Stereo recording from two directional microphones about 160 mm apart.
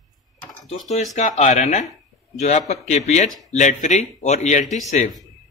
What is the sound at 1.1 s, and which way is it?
Speech, 45° left (ahead or behind).